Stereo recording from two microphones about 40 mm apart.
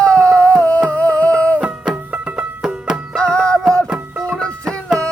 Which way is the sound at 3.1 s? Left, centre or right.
Centre.